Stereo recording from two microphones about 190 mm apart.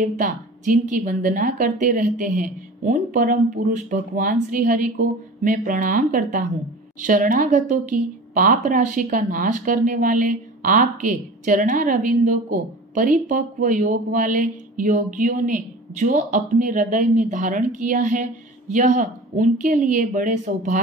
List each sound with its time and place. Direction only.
0.0 s speech: 40° right (ahead or behind)